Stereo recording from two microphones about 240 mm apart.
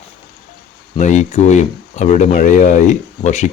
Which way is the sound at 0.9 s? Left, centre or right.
Left.